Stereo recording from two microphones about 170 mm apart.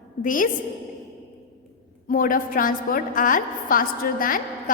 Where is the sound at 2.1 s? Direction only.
55° left (ahead or behind).